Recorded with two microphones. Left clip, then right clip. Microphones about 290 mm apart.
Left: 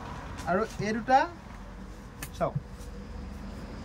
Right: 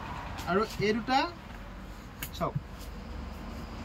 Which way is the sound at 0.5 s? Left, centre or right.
Centre.